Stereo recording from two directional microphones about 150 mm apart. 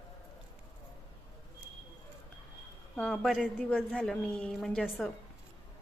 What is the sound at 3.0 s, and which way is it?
A woman's voice, 5° left (ahead or behind).